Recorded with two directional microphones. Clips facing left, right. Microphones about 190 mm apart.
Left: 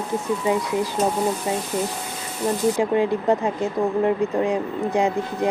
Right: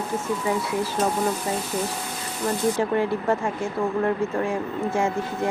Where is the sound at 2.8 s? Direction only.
20° left (ahead or behind).